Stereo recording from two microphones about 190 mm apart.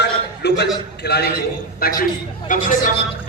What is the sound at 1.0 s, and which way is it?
A man's voice, 60° left (ahead or behind).